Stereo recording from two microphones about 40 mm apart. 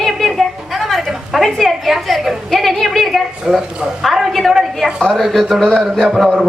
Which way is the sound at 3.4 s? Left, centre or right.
Right.